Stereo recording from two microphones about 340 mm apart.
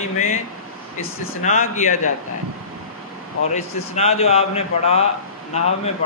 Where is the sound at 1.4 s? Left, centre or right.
Left.